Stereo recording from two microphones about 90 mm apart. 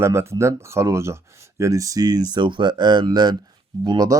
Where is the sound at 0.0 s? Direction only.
30° right (ahead or behind).